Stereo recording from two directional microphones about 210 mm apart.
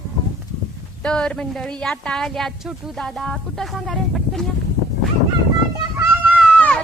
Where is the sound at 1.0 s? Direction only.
5° left (ahead or behind).